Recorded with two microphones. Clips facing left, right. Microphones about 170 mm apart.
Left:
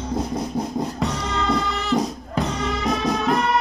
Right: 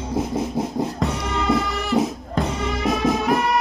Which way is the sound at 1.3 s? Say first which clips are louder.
Right 2 dB; 15° right (ahead or behind).